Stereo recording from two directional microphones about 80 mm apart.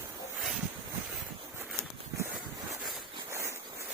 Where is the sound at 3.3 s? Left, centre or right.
Right.